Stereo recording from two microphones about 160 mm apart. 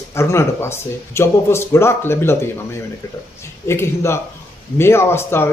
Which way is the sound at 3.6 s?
15° left (ahead or behind).